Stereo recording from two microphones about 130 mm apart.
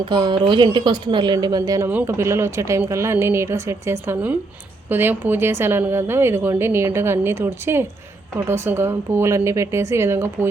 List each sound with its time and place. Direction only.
0.0 s a woman's voice: 35° right (ahead or behind)
1.9 s a woman's voice: 20° right (ahead or behind)